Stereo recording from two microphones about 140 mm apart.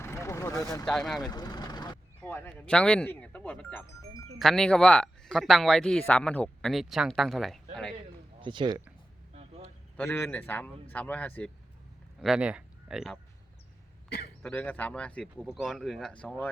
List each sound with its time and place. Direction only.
0.0 s vehicle: 20° left (ahead or behind)
0.9 s speech: centre (ahead or behind)
1.3 s vehicle: 30° left (ahead or behind)
2.2 s speech: 15° left (ahead or behind)
8.4 s speech: 35° right (ahead or behind)
10.0 s speech: 15° left (ahead or behind)
12.2 s speech: 5° right (ahead or behind)
14.4 s speech: 10° left (ahead or behind)